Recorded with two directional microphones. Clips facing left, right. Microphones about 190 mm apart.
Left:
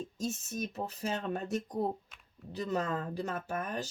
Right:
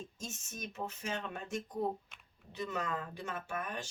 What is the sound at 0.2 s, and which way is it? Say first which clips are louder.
Speech: left 12 dB; 35° left (ahead or behind).